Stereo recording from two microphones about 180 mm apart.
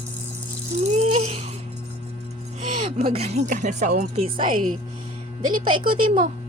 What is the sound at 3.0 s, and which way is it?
Speech, 35° right (ahead or behind).